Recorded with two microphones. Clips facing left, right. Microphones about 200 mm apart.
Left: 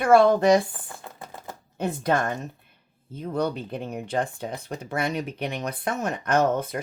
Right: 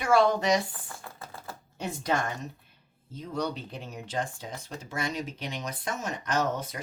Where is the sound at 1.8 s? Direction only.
55° left (ahead or behind).